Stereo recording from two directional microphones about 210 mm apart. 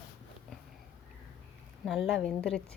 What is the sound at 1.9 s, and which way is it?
Speech, centre (ahead or behind).